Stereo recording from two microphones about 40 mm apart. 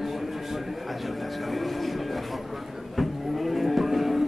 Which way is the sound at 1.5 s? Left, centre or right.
Centre.